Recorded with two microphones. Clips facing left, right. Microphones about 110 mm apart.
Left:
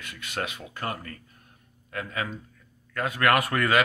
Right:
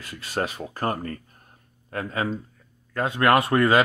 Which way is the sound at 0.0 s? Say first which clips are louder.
Right 5 dB; 35° right (ahead or behind).